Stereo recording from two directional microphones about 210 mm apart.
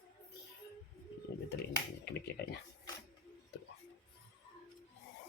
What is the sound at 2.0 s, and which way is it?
Speech, 55° left (ahead or behind).